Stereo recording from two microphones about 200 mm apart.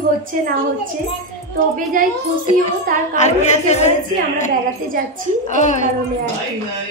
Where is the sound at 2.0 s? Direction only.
45° right (ahead or behind).